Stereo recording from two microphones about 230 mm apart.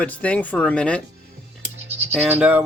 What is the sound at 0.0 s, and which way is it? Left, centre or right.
Speech, centre.